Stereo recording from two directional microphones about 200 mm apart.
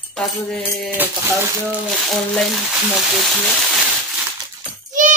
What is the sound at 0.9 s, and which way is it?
Speech, 10° right (ahead or behind).